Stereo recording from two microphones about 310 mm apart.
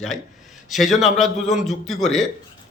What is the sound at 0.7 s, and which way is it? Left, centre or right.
A man's voice, centre.